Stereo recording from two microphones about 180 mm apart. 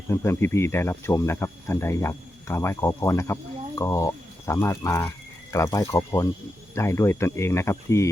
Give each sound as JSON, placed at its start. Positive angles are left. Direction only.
{"t": 0.1, "sound": "speech", "side_deg": 15}